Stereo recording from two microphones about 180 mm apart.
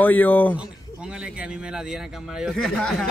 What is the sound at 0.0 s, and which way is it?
Speech, 10° left (ahead or behind).